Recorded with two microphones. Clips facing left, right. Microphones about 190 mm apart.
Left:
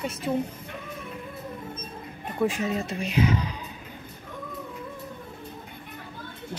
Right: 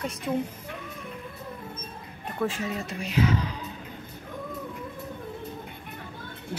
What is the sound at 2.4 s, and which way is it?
Speech, 20° left (ahead or behind).